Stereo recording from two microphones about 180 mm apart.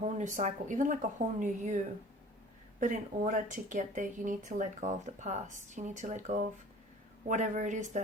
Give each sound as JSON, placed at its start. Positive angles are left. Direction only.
{"t": 0.0, "sound": "speech", "side_deg": -45}
{"t": 2.8, "sound": "speech", "side_deg": -45}